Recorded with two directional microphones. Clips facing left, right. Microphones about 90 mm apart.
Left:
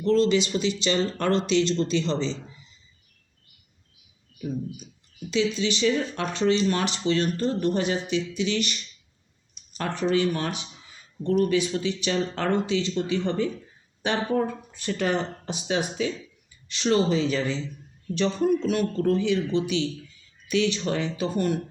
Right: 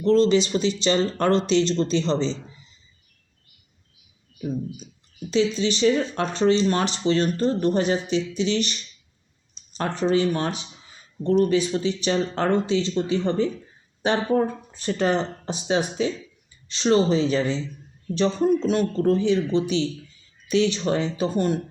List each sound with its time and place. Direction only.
0.0 s speech: 30° right (ahead or behind)
4.4 s speech: 35° right (ahead or behind)